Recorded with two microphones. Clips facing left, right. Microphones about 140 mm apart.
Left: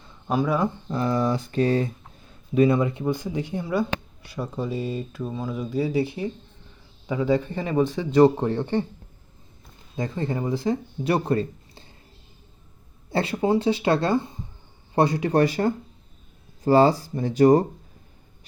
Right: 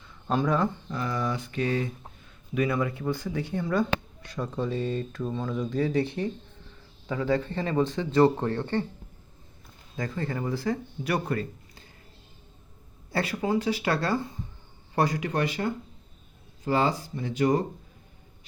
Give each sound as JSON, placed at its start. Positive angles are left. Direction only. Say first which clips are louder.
{"t": 0.3, "sound": "speech", "louder": "left 2 dB", "side_deg": 10}
{"t": 0.9, "sound": "speech", "louder": "left 7 dB", "side_deg": 30}
{"t": 9.9, "sound": "speech", "louder": "left 4 dB", "side_deg": 20}
{"t": 13.1, "sound": "speech", "louder": "left 5 dB", "side_deg": 25}